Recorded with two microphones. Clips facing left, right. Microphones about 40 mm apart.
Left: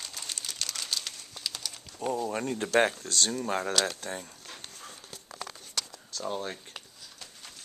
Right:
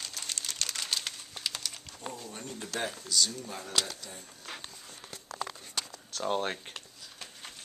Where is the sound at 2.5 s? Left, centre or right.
Left.